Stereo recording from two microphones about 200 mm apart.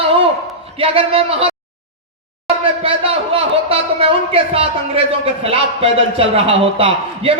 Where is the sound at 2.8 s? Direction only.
25° right (ahead or behind).